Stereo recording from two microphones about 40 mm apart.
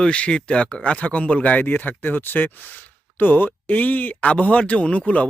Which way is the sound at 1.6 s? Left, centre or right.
Left.